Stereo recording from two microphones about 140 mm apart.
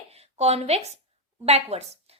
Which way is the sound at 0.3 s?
50° right (ahead or behind).